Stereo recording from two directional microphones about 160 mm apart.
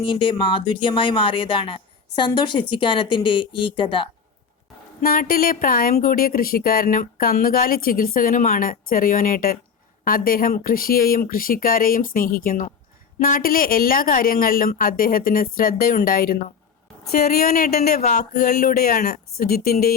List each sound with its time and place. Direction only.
0.1 s speech: 30° left (ahead or behind)
4.9 s speech: 65° left (ahead or behind)
18.0 s a sound: 50° left (ahead or behind)
18.3 s speech: 75° left (ahead or behind)